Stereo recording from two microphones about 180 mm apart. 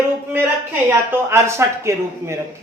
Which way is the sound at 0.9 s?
15° right (ahead or behind).